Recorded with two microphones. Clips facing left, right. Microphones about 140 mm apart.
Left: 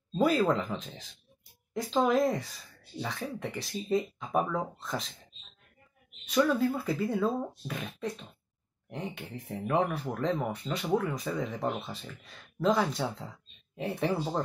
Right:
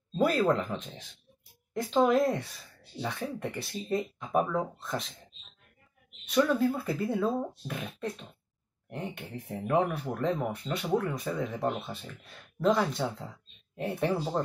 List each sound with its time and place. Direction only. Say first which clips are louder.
0.2 s speech: even; centre (ahead or behind)
6.2 s speech: right 1 dB; centre (ahead or behind)